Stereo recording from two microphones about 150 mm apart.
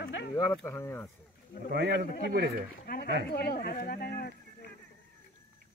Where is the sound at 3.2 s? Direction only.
90° left.